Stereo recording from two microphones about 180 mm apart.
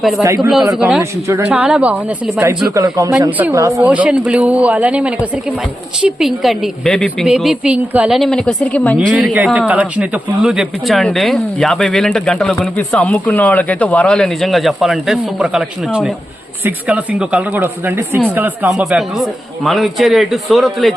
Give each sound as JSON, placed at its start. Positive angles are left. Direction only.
{"t": 0.7, "sound": "a woman's voice", "side_deg": 0}
{"t": 2.6, "sound": "a man's voice", "side_deg": -20}
{"t": 9.0, "sound": "a woman's voice", "side_deg": -5}